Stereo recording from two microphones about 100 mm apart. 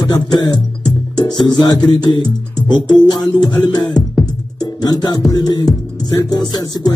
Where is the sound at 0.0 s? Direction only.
45° left (ahead or behind).